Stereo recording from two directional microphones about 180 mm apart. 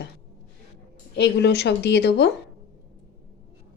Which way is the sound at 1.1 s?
70° left (ahead or behind).